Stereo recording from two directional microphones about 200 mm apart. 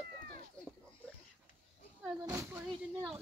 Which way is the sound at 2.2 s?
10° right (ahead or behind).